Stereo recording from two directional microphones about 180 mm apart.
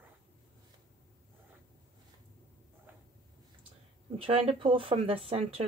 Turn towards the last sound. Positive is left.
turn(degrees=-35)  # may be behind; listen again after turning